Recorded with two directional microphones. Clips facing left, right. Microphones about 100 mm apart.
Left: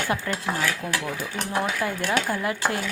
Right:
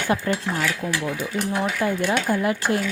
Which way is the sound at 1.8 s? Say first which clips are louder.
Right 3 dB; 20° right (ahead or behind).